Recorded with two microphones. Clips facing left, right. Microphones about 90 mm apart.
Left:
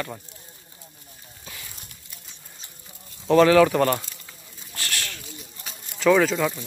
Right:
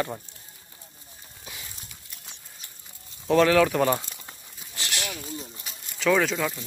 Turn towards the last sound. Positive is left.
turn(degrees=5)  # may be behind; listen again after turning